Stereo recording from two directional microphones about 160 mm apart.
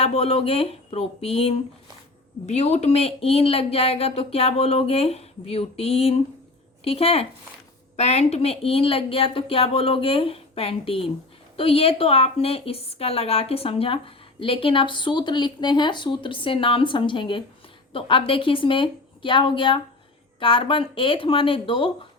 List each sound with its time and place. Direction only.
0.0 s a woman's voice: 40° left (ahead or behind)